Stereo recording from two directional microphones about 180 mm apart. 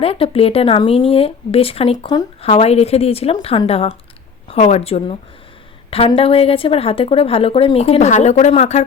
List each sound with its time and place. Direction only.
0.0 s speech: 30° left (ahead or behind)